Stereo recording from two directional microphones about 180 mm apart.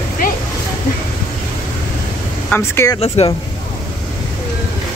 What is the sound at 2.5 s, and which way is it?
Speech, 15° left (ahead or behind).